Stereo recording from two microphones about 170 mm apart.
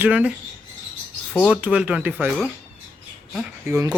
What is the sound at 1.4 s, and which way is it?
Speech, 5° right (ahead or behind).